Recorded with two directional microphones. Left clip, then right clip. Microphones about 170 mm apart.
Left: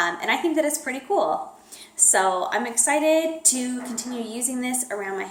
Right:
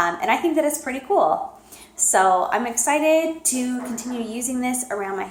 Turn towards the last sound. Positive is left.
turn(degrees=20)  # may be behind; listen again after turning